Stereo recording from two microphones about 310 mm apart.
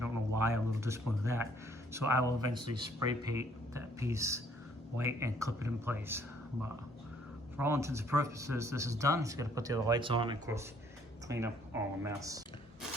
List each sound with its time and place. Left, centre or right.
0.0 s speech: centre